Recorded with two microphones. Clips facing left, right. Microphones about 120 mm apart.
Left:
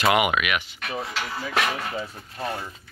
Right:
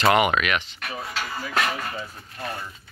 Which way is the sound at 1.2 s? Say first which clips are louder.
Right 1 dB; 5° left (ahead or behind).